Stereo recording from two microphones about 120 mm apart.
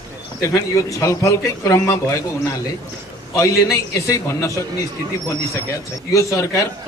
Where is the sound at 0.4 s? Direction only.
25° left (ahead or behind).